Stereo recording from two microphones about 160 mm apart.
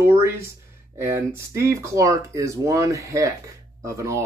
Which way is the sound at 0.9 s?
15° right (ahead or behind).